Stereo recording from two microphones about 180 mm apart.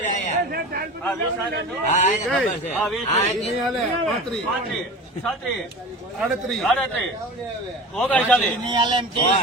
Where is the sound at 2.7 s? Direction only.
Centre (ahead or behind).